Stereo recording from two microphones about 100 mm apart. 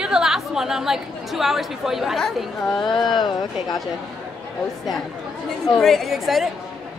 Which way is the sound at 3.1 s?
50° left (ahead or behind).